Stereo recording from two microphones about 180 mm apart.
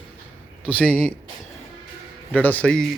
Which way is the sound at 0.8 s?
10° left (ahead or behind).